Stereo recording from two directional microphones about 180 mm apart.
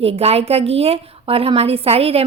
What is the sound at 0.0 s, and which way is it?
A woman's voice, 35° right (ahead or behind).